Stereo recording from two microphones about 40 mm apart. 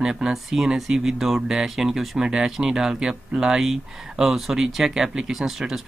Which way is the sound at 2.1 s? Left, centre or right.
Centre.